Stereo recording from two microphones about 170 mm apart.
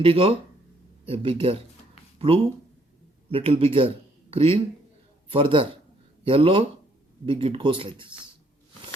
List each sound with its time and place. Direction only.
0.0 s speech: 35° right (ahead or behind)